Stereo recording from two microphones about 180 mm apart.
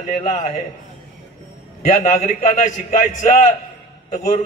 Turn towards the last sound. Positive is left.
turn(degrees=40)  # may be behind; listen again after turning